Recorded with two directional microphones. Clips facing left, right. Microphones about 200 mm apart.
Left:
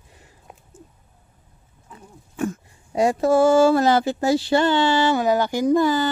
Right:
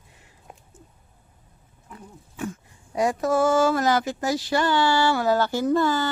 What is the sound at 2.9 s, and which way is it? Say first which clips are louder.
Speech: left 5 dB; 25° left (ahead or behind).